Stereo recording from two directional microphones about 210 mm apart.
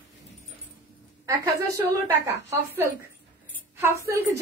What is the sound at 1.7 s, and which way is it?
Speech, 15° right (ahead or behind).